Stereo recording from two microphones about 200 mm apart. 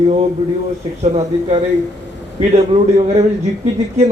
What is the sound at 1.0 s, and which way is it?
A man's voice, 30° right (ahead or behind).